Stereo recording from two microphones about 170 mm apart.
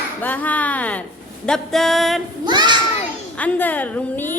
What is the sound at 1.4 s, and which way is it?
Music, 5° left (ahead or behind).